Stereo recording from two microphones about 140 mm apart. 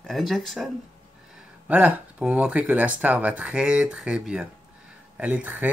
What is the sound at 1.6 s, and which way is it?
Speech, 10° right (ahead or behind).